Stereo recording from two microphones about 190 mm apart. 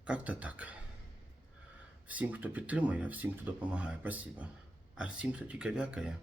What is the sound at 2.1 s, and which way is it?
Speech, 10° right (ahead or behind).